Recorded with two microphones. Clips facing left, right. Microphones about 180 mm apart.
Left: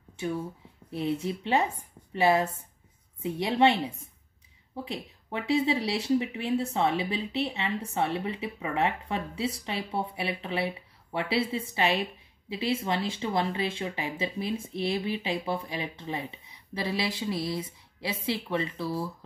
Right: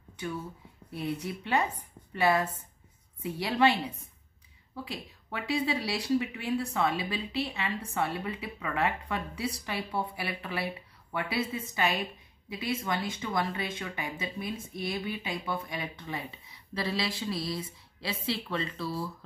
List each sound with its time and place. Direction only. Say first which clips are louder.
0.2 s speech: left 5 dB; 25° left (ahead or behind)